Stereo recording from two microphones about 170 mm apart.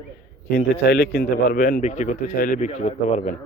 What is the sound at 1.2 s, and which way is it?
Speech, 50° left (ahead or behind).